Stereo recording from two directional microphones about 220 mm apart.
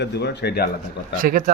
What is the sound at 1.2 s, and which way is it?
Speech, 40° right (ahead or behind).